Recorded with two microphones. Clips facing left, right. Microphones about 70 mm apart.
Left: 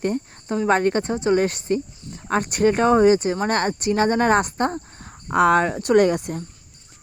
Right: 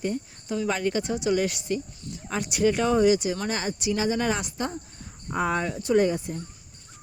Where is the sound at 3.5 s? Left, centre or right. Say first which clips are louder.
Left 7 dB; left.